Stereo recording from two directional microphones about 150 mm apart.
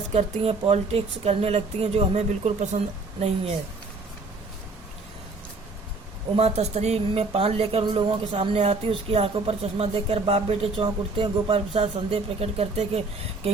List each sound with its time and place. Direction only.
0.1 s speech: 45° right (ahead or behind)
6.3 s speech: 45° right (ahead or behind)